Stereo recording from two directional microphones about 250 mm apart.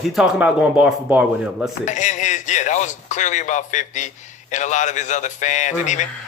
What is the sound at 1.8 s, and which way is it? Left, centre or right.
Speech, left.